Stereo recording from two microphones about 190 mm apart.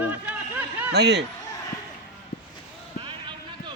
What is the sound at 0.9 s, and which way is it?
Speech, 65° right (ahead or behind).